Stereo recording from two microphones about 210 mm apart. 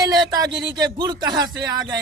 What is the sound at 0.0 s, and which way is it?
Speech, 20° right (ahead or behind).